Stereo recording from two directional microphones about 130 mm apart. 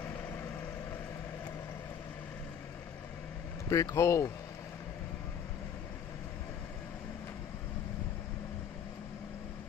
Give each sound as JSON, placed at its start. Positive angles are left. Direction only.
{"t": 3.6, "sound": "speech", "side_deg": 25}